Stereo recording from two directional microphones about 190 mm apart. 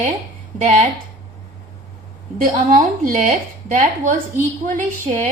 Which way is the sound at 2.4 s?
45° right (ahead or behind).